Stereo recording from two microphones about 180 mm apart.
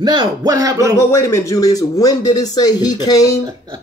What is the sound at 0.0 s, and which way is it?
Speech, 25° right (ahead or behind).